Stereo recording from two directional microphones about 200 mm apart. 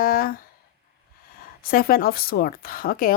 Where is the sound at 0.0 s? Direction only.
45° left (ahead or behind).